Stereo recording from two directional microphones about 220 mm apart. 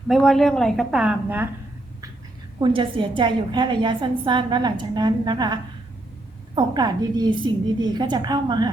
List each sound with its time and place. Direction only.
0.1 s a woman's voice: centre (ahead or behind)
2.6 s a woman's voice: 20° right (ahead or behind)